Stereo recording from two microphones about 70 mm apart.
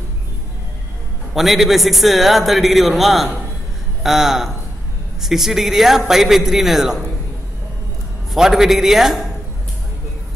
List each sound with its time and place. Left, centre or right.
1.3 s a man's voice: centre
8.3 s a man's voice: centre